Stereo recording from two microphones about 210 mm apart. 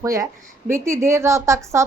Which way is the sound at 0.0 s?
15° right (ahead or behind).